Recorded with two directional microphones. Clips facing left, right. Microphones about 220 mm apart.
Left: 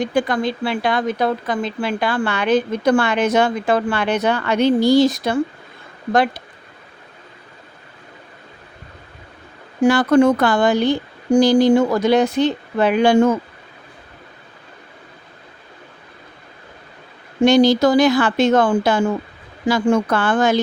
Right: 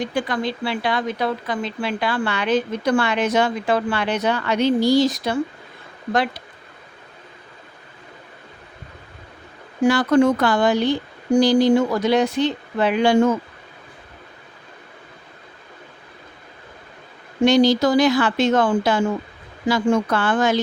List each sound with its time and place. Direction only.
0.1 s speech: 45° left (ahead or behind)
9.8 s speech: 50° left (ahead or behind)
17.4 s speech: 50° left (ahead or behind)